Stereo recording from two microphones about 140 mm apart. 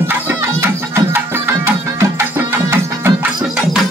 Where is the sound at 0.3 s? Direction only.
15° right (ahead or behind).